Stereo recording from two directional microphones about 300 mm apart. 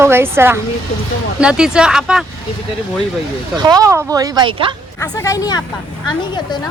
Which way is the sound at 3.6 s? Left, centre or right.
Centre.